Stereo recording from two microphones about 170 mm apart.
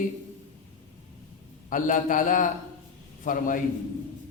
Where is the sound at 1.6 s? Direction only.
50° left (ahead or behind).